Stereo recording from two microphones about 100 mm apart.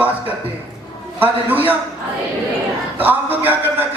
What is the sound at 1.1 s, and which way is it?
Speech, 20° right (ahead or behind).